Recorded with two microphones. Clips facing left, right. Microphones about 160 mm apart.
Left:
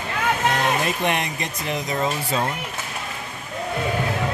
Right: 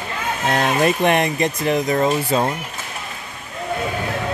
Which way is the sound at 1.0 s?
55° right (ahead or behind).